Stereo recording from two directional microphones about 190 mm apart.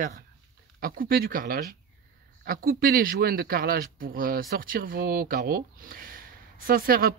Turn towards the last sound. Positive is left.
turn(degrees=-50)  # may be behind; listen again after turning